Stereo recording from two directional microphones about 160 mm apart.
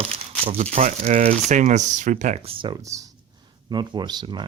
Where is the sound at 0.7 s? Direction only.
45° right (ahead or behind).